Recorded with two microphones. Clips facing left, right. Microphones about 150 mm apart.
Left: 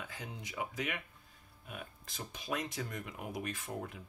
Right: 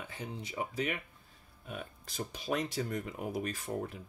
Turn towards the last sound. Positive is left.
turn(degrees=-35)  # may be behind; listen again after turning